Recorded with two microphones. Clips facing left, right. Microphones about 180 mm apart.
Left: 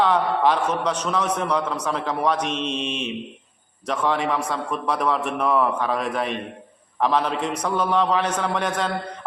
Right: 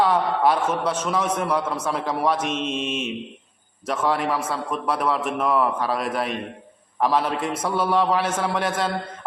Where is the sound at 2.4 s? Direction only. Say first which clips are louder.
Even; 50° right (ahead or behind).